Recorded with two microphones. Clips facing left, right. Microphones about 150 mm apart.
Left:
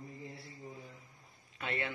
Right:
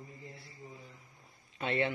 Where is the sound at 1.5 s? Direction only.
30° right (ahead or behind).